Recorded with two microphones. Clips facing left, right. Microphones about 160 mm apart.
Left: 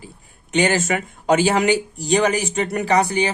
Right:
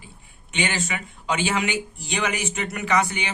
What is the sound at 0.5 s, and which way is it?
Speech, 45° left (ahead or behind).